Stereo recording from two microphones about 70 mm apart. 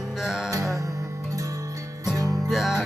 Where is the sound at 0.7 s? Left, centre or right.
Right.